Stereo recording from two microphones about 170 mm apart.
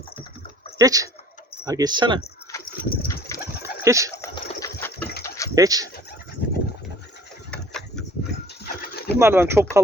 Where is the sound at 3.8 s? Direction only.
15° right (ahead or behind).